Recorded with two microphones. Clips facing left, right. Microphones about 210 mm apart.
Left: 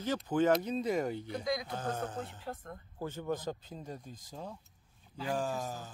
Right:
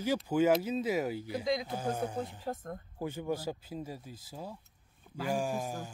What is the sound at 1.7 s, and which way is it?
Speech, 10° right (ahead or behind).